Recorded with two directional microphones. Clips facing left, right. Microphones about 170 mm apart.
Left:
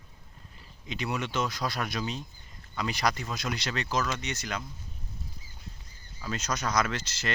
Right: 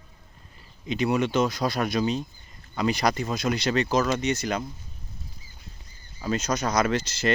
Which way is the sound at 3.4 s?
50° right (ahead or behind).